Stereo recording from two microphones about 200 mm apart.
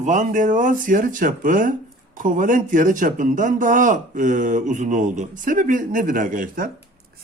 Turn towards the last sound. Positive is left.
turn(degrees=-45)  # may be behind; listen again after turning